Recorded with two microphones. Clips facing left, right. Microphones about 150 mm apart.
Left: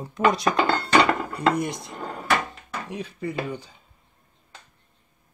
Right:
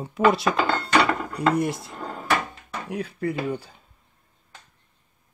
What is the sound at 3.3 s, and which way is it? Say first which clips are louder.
Speech: right 1 dB; 10° right (ahead or behind).